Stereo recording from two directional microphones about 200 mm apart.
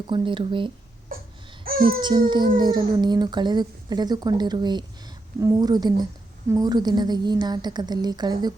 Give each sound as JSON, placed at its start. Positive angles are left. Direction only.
{"t": 0.1, "sound": "speech", "side_deg": -25}
{"t": 1.1, "sound": "baby cry", "side_deg": -45}
{"t": 2.0, "sound": "speech", "side_deg": -20}